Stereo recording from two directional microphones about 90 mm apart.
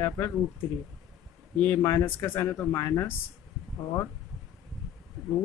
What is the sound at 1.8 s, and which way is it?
A man's voice, 30° left (ahead or behind).